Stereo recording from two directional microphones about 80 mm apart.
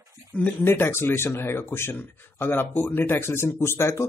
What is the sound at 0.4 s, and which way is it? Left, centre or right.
Speech, left.